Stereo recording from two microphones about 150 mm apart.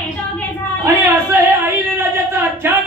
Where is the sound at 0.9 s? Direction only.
15° right (ahead or behind).